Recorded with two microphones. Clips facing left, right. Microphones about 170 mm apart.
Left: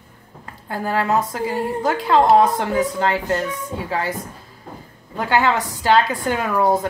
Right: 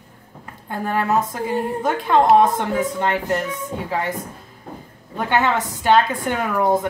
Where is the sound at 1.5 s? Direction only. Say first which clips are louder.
Even; 20° right (ahead or behind).